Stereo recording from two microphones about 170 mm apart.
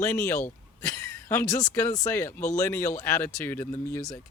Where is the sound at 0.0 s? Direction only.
15° left (ahead or behind).